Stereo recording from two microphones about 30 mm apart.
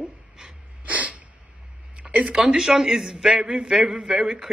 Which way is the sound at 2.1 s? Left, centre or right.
Right.